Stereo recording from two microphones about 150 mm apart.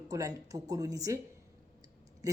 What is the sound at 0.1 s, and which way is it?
Speech, 25° right (ahead or behind).